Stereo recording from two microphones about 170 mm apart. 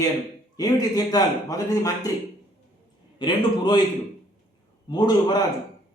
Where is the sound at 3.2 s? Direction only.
30° left (ahead or behind).